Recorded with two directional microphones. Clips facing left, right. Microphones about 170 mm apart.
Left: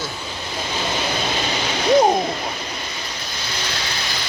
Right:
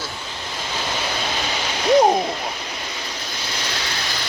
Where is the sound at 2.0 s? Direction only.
10° right (ahead or behind).